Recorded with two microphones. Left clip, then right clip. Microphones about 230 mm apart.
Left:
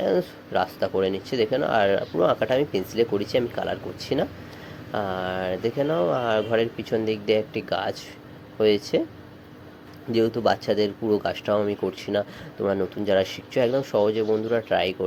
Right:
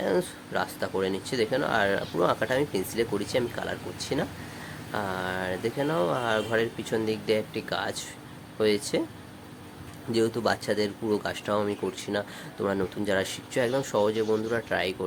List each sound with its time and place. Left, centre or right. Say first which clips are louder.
0.0 s speech: left 4 dB; centre
10.1 s speech: left 4 dB; centre